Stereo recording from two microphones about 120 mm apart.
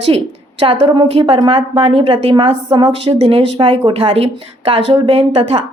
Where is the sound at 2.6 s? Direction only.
45° right (ahead or behind).